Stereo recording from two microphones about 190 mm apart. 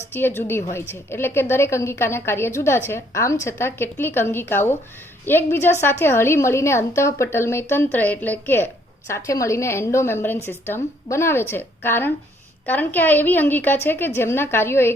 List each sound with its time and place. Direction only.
0.1 s a woman's voice: 10° left (ahead or behind)